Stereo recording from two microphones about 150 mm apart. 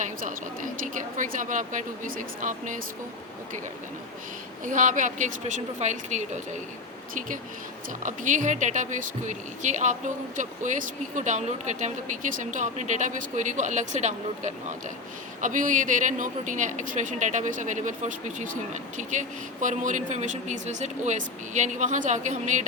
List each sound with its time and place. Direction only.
0.0 s speech: 60° right (ahead or behind)
4.6 s speech: 60° right (ahead or behind)